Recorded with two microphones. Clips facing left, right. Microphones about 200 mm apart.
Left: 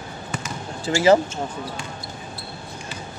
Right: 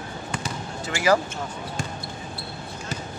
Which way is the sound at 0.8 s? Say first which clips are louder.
Left 5 dB; 30° left (ahead or behind).